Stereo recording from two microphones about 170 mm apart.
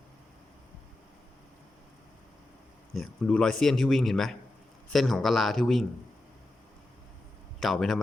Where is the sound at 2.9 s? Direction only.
5° left (ahead or behind).